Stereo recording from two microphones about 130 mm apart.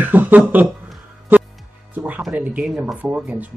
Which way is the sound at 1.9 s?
15° right (ahead or behind).